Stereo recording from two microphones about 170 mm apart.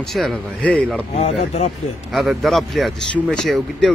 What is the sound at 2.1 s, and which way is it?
Speech, centre (ahead or behind).